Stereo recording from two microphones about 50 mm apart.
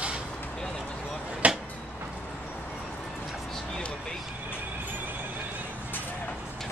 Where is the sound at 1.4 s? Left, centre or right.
Right.